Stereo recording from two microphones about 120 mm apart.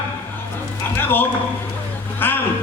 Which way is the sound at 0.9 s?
15° left (ahead or behind).